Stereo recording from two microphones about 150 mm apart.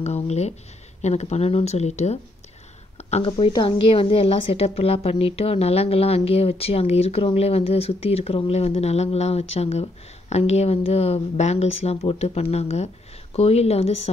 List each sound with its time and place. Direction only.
0.0 s a woman's voice: 45° left (ahead or behind)
3.0 s a sound: 45° left (ahead or behind)
3.3 s a woman's voice: 35° left (ahead or behind)